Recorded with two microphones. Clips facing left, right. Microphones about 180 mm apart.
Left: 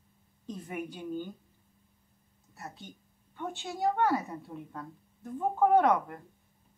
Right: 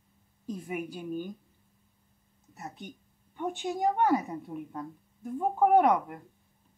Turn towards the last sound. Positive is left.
turn(degrees=-10)  # may be behind; listen again after turning